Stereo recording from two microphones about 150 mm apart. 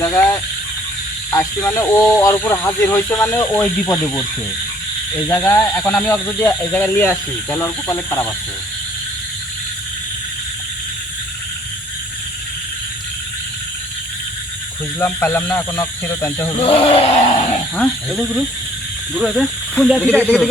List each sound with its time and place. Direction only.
0.0 s speech: 10° left (ahead or behind)
1.3 s speech: 20° left (ahead or behind)
3.5 s speech: 5° left (ahead or behind)
3.9 s speech: 20° left (ahead or behind)
14.9 s speech: 15° left (ahead or behind)
16.6 s speech: 40° left (ahead or behind)
17.7 s speech: centre (ahead or behind)